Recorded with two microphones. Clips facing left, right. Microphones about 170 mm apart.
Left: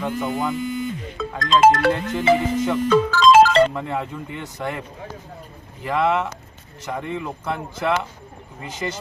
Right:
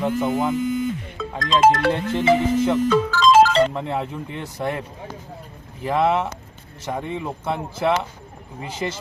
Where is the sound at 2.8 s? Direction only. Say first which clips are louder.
Left 2 dB; 60° left (ahead or behind).